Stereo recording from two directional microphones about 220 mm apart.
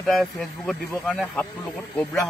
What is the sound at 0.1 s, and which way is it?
Speech, centre (ahead or behind).